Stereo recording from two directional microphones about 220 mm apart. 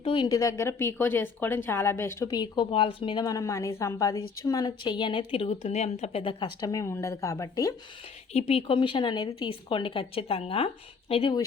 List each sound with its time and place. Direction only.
0.0 s a woman's voice: 20° left (ahead or behind)
8.3 s a woman's voice: 25° left (ahead or behind)